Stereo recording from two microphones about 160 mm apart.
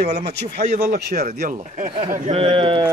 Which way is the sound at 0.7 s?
80° right.